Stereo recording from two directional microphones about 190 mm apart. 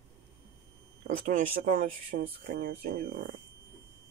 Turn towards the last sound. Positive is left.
turn(degrees=-50)  # may be behind; listen again after turning